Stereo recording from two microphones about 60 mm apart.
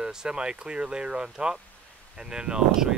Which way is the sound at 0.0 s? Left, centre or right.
Centre.